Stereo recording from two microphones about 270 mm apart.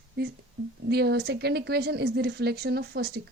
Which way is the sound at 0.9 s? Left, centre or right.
Right.